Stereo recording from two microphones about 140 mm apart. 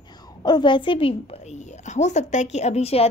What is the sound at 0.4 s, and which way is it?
A woman's voice, 35° left (ahead or behind).